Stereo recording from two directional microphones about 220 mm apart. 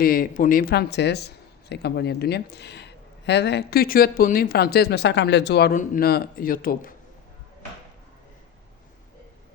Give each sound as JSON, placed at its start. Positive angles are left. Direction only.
{"t": 0.0, "sound": "speech", "side_deg": 40}